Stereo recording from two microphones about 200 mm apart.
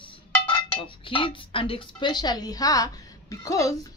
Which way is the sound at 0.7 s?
25° left (ahead or behind).